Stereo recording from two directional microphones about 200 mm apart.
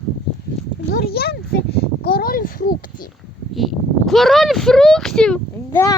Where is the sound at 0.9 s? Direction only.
50° left (ahead or behind).